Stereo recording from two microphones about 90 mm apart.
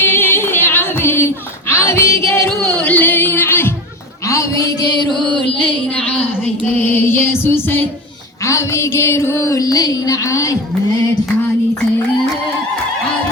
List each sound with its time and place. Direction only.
0.0 s singing: 20° left (ahead or behind)
1.7 s music: 30° left (ahead or behind)
2.6 s music: 15° left (ahead or behind)
4.3 s a sound: 35° left (ahead or behind)
5.0 s music: 60° right (ahead or behind)
6.7 s music: 20° left (ahead or behind); by 10.6 s 40° left (ahead or behind)